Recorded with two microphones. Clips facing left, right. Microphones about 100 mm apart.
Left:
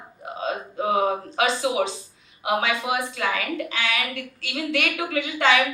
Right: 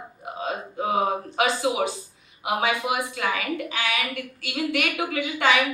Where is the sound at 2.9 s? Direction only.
30° right (ahead or behind).